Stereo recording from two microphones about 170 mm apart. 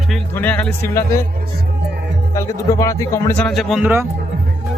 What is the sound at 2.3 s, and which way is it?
Speech, 20° left (ahead or behind).